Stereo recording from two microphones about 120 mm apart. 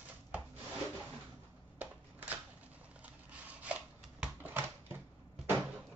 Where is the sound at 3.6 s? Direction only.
10° right (ahead or behind).